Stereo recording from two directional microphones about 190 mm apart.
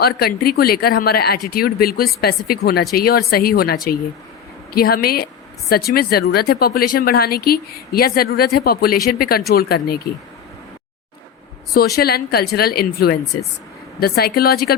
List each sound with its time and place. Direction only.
0.0 s a woman's voice: 55° left (ahead or behind)
11.7 s a woman's voice: 55° left (ahead or behind)